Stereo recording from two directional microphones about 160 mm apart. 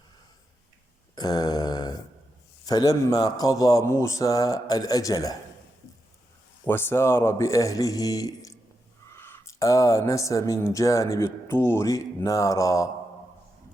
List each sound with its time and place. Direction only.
1.1 s grunt: 25° left (ahead or behind)
2.6 s a man's voice: 25° left (ahead or behind)
6.7 s a man's voice: 15° left (ahead or behind)